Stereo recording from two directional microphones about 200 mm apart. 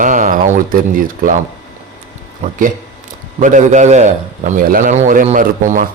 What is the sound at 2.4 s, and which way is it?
A man's voice, 40° right (ahead or behind).